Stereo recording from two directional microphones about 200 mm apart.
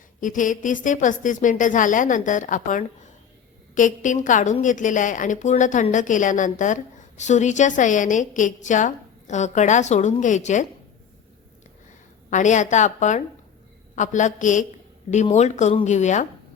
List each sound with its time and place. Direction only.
0.2 s a woman's voice: 40° left (ahead or behind)
12.3 s a woman's voice: 40° left (ahead or behind)